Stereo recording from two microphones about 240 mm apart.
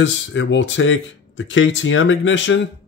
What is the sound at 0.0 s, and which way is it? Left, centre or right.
Speech, left.